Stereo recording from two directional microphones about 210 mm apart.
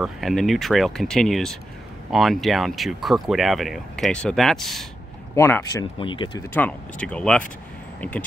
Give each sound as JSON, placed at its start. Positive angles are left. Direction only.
{"t": 0.0, "sound": "speech", "side_deg": 0}
{"t": 5.3, "sound": "speech", "side_deg": 15}
{"t": 6.5, "sound": "speech", "side_deg": 5}